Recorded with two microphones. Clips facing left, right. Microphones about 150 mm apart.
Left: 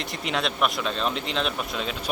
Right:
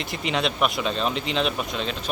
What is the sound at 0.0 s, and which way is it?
Speech, centre (ahead or behind).